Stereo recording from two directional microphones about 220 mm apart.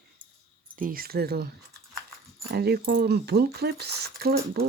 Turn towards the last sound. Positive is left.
turn(degrees=-45)  # may be behind; listen again after turning